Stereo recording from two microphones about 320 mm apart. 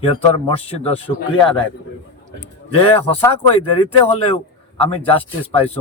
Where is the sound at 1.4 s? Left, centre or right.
Centre.